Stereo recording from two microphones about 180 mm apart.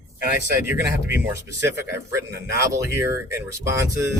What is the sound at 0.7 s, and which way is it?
Speech, 10° right (ahead or behind).